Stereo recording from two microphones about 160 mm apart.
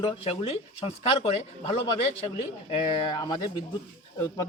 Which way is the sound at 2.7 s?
25° left (ahead or behind).